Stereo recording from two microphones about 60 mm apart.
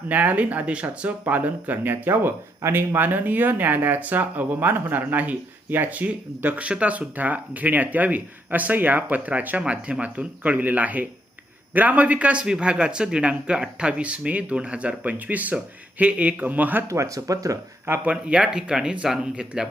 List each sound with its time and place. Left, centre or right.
0.1 s speech: right
16.9 s speech: right
18.0 s speech: centre